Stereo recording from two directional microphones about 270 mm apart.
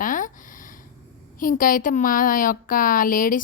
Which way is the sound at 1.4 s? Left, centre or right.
Left.